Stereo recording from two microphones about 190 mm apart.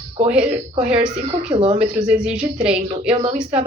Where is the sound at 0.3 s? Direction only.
5° right (ahead or behind).